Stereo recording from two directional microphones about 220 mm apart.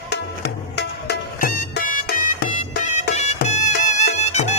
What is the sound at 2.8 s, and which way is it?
Music, 30° left (ahead or behind).